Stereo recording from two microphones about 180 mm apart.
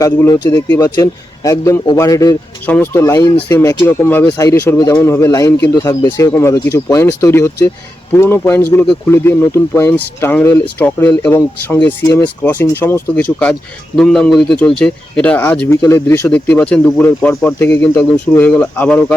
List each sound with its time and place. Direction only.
0.0 s a man's voice: 20° left (ahead or behind)